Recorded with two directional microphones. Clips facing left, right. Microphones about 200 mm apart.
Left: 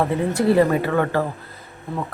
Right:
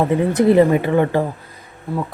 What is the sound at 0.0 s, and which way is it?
Speech, 20° right (ahead or behind).